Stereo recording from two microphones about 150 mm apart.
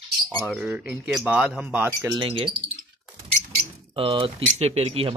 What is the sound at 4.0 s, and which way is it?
Speech, 35° right (ahead or behind).